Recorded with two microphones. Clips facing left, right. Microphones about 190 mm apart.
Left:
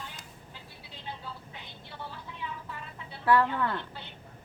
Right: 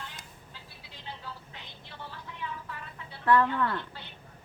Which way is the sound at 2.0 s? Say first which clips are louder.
Right 1 dB; 15° left (ahead or behind).